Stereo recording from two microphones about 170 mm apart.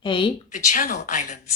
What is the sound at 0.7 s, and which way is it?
Speech, 50° left (ahead or behind).